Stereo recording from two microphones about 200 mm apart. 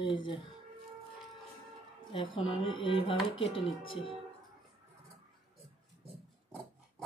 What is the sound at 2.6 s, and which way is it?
Speech, 25° left (ahead or behind).